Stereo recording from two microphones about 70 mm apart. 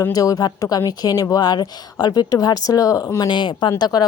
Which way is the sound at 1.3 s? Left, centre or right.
Left.